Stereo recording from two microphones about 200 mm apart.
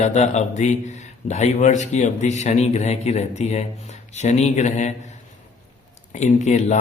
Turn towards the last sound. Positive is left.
turn(degrees=35)  # may be behind; listen again after turning